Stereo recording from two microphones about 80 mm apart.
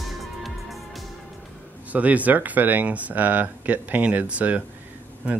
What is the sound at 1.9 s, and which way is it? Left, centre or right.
Speech, centre.